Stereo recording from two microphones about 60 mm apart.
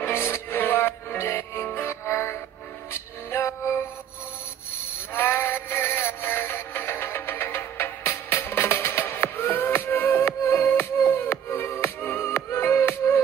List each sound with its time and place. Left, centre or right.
0.0 s music: left
5.1 s synthetic singing: left